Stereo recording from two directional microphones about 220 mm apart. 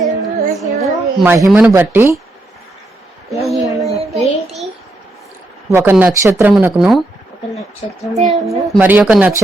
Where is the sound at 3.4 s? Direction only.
Centre (ahead or behind).